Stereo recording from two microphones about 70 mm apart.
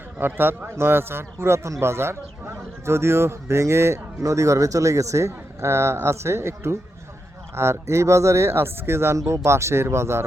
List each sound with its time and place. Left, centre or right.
0.2 s speech: right